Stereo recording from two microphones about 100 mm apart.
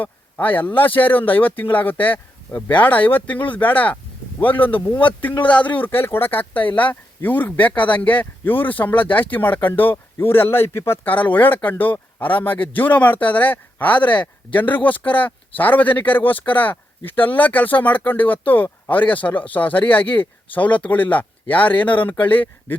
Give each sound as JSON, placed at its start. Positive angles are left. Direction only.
{"t": 0.0, "sound": "speech", "side_deg": 20}